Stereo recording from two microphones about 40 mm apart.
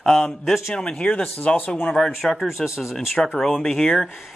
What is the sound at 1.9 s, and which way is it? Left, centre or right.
Speech, centre.